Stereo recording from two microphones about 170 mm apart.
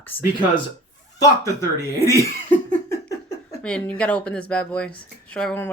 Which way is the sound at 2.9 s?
20° left (ahead or behind).